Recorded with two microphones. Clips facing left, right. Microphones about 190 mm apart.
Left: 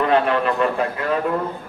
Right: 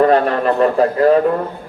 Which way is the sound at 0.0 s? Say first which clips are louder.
Right 5 dB; 40° right (ahead or behind).